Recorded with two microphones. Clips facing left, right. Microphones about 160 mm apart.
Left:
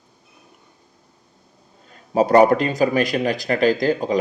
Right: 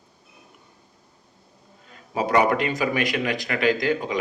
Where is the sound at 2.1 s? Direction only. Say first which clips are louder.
Left 7 dB; 35° left (ahead or behind).